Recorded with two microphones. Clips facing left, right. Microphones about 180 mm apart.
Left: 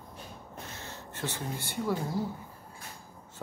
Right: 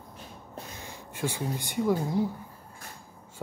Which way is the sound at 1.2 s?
10° right (ahead or behind).